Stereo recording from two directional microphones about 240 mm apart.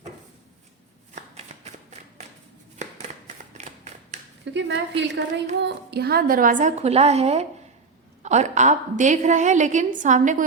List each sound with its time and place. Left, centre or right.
3.6 s scissors: right
4.5 s a woman's voice: right